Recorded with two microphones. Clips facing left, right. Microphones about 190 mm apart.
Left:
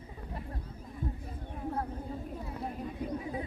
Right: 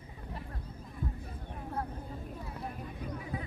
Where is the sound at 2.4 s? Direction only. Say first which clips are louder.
Left 4 dB; 25° left (ahead or behind).